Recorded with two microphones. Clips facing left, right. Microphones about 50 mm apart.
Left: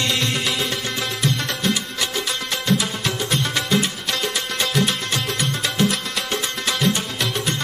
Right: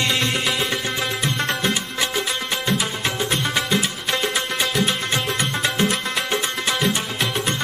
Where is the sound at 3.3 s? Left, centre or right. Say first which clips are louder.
Left 1 dB; centre.